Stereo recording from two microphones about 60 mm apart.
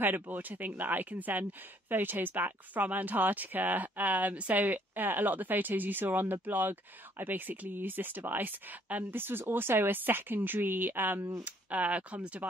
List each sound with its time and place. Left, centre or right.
0.0 s speech: right
11.4 s speech: right